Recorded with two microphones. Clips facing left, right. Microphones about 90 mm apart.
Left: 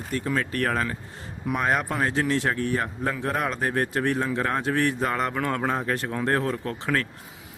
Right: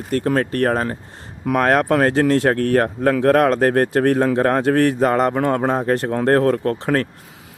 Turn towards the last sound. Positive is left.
turn(degrees=-45)  # may be behind; listen again after turning